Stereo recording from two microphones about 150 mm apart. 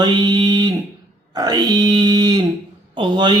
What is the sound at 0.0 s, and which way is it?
Speech, 30° right (ahead or behind).